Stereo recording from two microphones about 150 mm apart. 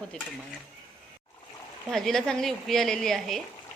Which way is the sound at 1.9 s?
5° left (ahead or behind).